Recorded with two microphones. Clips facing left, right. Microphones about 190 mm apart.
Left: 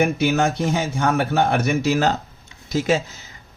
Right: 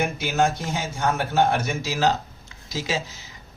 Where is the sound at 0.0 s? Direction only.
60° left (ahead or behind).